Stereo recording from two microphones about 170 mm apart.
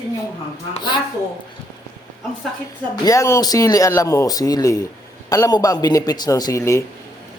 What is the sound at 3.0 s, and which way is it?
Speech, 20° left (ahead or behind).